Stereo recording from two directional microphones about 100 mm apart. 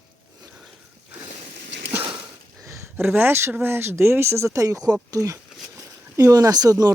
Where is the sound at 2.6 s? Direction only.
25° right (ahead or behind).